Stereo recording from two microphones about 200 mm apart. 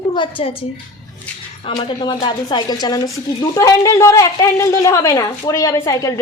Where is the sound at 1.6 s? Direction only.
20° left (ahead or behind).